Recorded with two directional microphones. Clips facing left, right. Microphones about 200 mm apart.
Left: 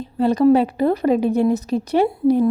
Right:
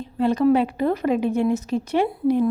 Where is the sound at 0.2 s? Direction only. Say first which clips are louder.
Left 3 dB; 35° left (ahead or behind).